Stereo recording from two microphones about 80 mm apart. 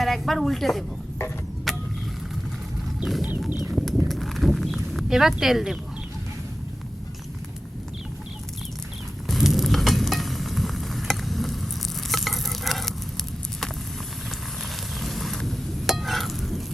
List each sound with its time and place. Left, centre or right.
0.0 s speech: centre
1.7 s vehicle: centre
3.0 s speech: centre
3.6 s a sound: centre
4.1 s horse: centre
9.2 s sizzle: centre
12.1 s patter: centre
15.0 s frying: centre